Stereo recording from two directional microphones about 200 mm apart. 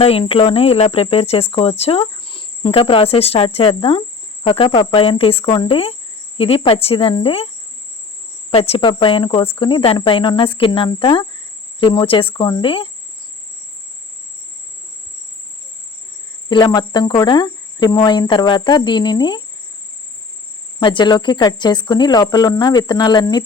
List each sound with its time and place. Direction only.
0.0 s speech: 30° left (ahead or behind)
16.5 s speech: 25° left (ahead or behind)
20.8 s speech: 20° left (ahead or behind)